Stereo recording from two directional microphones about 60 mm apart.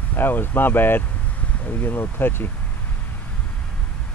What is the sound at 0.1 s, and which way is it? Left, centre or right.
Speech, left.